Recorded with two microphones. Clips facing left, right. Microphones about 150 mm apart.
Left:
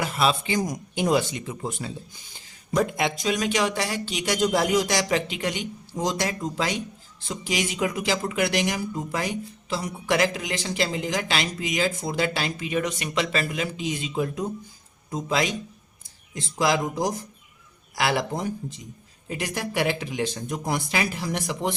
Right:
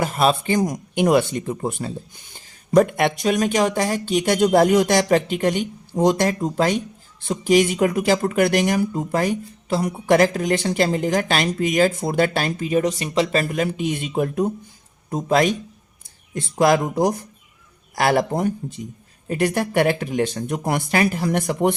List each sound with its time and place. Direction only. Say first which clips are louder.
0.0 s speech: right 5 dB; 45° right (ahead or behind)